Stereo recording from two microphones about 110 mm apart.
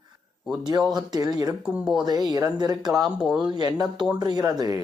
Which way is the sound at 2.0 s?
35° right (ahead or behind).